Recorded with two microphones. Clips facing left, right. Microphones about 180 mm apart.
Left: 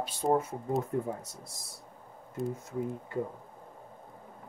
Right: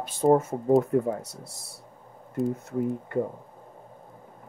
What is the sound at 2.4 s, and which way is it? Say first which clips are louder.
Speech: right 7 dB; centre (ahead or behind).